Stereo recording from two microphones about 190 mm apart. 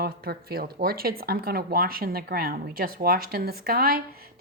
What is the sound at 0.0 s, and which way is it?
Speech, 55° right (ahead or behind).